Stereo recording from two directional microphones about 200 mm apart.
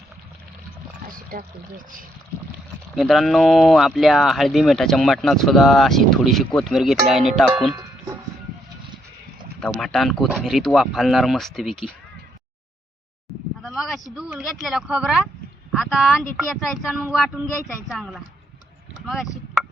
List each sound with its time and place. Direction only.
1.1 s pour: 45° right (ahead or behind)
2.9 s speech: centre (ahead or behind)
9.6 s speech: 5° left (ahead or behind)
13.6 s a sound: centre (ahead or behind)
14.2 s speech: centre (ahead or behind)